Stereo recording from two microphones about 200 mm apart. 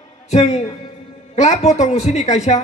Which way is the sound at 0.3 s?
35° left (ahead or behind).